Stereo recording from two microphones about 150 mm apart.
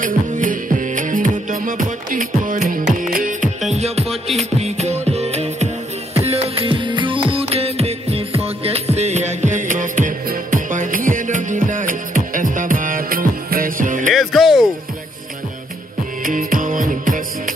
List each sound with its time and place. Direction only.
0.0 s music: 60° right (ahead or behind)
3.7 s music: 45° right (ahead or behind)
4.0 s music: centre (ahead or behind)
4.6 s music: 45° right (ahead or behind)
14.1 s music: centre (ahead or behind)
16.3 s music: 65° right (ahead or behind)